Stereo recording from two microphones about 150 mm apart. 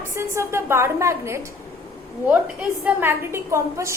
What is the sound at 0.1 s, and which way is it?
A woman's voice, 20° right (ahead or behind).